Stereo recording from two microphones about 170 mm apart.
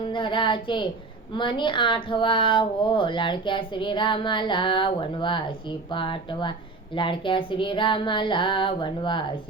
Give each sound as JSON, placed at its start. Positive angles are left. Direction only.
{"t": 0.1, "sound": "a woman's voice", "side_deg": 30}